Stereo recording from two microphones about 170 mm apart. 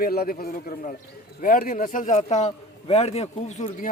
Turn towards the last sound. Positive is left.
turn(degrees=45)  # may be behind; listen again after turning